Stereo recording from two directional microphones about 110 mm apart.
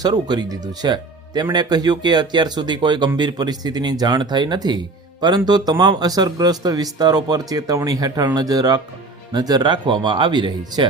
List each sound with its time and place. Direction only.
0.0 s speech: 40° right (ahead or behind)